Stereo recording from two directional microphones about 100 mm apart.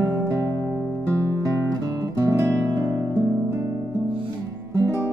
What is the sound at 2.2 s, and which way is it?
Music, 30° right (ahead or behind).